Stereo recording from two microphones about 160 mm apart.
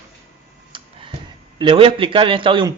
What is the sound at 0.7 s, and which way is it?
Tick-tock, 35° right (ahead or behind).